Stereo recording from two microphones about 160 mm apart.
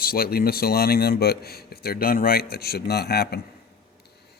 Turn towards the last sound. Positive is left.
turn(degrees=85)